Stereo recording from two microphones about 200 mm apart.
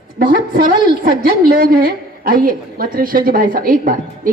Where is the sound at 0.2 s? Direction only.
45° right (ahead or behind).